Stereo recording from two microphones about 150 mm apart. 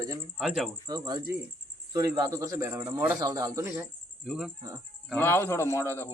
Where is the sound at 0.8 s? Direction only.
25° right (ahead or behind); by 3.1 s 10° right (ahead or behind).